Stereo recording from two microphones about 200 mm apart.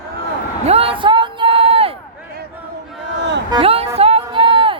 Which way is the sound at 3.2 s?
60° right (ahead or behind).